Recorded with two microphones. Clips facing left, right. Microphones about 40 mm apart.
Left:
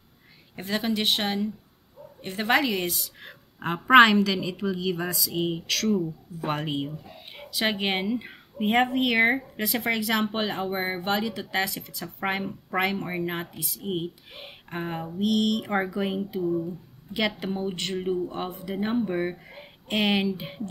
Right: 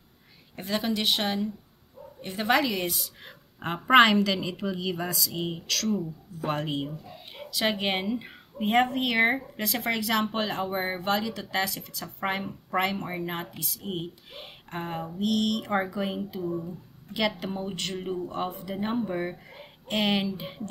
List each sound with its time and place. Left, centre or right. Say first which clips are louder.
0.6 s a woman's voice: left 1 dB; centre
16.4 s speech: left 6 dB; centre
17.1 s a woman's voice: left 1 dB; centre
19.0 s speech: left 3 dB; centre